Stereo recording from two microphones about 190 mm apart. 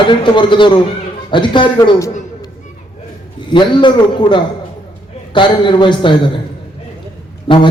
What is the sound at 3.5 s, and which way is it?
A man's voice, 25° left (ahead or behind).